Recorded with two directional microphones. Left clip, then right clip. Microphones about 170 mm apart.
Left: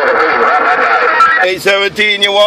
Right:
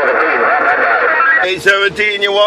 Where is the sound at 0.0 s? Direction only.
45° left (ahead or behind).